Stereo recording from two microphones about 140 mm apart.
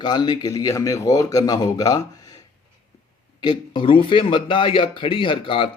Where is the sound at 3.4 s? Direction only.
35° left (ahead or behind).